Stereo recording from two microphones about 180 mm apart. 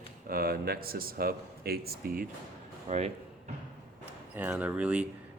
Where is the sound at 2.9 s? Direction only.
40° right (ahead or behind).